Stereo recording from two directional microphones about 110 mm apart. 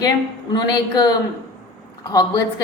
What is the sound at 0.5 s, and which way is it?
A woman's voice, 40° left (ahead or behind).